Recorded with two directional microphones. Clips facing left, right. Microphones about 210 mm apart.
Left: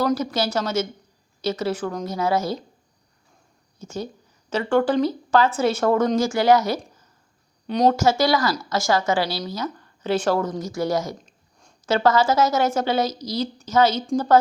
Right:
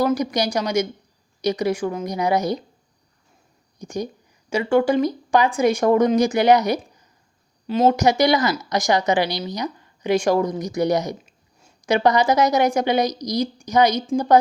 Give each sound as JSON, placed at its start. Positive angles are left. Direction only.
{"t": 0.0, "sound": "a woman's voice", "side_deg": -15}
{"t": 3.8, "sound": "a woman's voice", "side_deg": -15}
{"t": 7.9, "sound": "a woman's voice", "side_deg": -15}
{"t": 11.2, "sound": "a woman's voice", "side_deg": -5}